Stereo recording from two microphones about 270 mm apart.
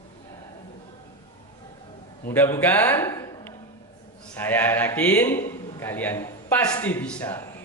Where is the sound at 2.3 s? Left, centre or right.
Centre.